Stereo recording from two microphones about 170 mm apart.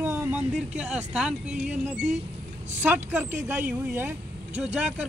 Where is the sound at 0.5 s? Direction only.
5° right (ahead or behind).